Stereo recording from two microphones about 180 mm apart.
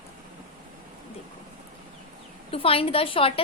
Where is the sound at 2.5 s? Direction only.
30° left (ahead or behind).